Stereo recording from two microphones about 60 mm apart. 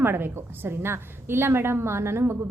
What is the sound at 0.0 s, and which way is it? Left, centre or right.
A woman's voice, right.